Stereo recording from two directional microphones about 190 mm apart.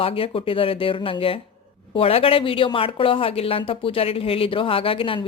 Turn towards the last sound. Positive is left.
turn(degrees=30)  # may be behind; listen again after turning